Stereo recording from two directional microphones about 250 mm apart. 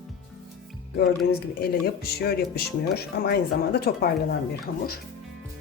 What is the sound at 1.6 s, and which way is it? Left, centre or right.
Speech, left.